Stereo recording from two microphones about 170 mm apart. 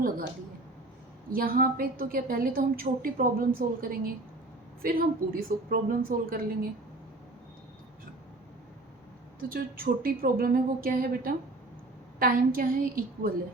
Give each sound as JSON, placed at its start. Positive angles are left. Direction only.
{"t": 1.3, "sound": "a woman's voice", "side_deg": -60}
{"t": 9.4, "sound": "a woman's voice", "side_deg": -60}